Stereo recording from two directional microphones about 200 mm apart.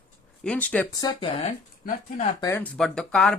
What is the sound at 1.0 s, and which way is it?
Speech, 20° left (ahead or behind).